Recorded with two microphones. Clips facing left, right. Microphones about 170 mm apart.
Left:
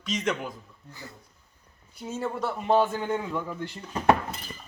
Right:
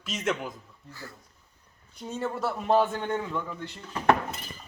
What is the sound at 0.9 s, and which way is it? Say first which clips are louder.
Speech: right 1 dB; 20° left (ahead or behind).